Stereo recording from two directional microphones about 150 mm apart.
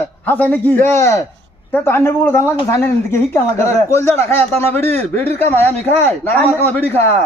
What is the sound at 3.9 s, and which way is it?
Speech, 15° left (ahead or behind).